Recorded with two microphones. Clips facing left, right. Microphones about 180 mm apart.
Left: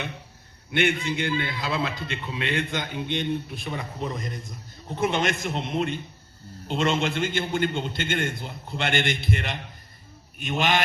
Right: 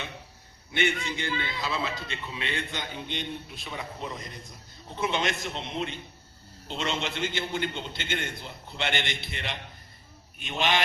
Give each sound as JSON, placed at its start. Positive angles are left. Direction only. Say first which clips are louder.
{"t": 0.7, "sound": "a man's voice", "louder": "left 4 dB", "side_deg": 55}